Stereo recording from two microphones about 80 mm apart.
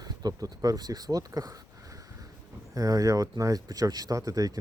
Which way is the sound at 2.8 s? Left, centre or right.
Right.